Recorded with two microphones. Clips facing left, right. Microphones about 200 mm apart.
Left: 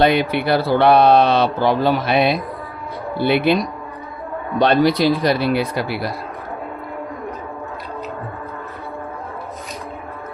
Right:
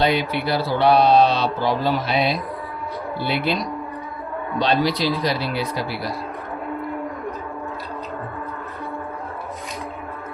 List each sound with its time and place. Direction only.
0.0 s speech: 55° left (ahead or behind)
4.6 s speech: 55° left (ahead or behind)